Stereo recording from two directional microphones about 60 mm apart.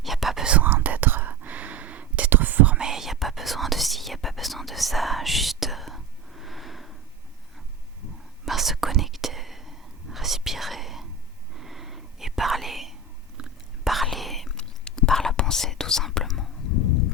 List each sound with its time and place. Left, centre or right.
0.0 s whispering: centre
0.4 s whispering: right
2.7 s whispering: centre
8.4 s whispering: centre
14.5 s whispering: centre